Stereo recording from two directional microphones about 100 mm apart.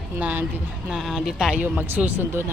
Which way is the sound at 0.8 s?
5° right (ahead or behind).